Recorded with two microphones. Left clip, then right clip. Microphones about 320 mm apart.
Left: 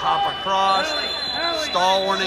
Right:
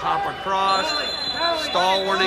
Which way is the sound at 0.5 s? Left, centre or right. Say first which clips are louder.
Even; centre.